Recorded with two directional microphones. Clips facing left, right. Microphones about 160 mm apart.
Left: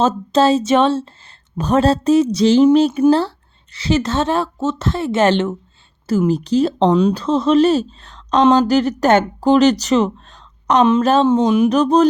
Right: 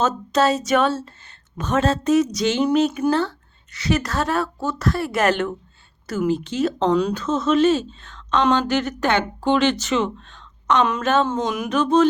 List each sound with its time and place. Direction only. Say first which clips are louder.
0.0 s speech: left 5 dB; 30° left (ahead or behind)